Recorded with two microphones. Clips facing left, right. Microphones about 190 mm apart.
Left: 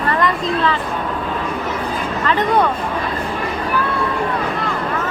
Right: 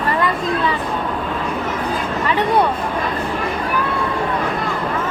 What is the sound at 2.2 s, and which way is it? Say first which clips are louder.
Speech: left 1 dB; 10° right (ahead or behind).